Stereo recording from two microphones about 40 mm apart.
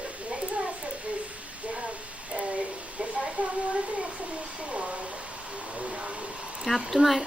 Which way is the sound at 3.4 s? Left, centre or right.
Right.